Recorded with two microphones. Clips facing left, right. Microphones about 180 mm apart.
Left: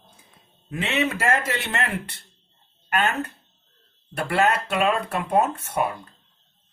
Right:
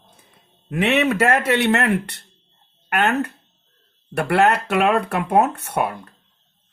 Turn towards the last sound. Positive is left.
turn(degrees=-65)  # may be behind; listen again after turning